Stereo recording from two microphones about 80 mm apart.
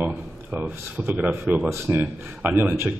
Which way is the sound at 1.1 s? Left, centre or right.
Right.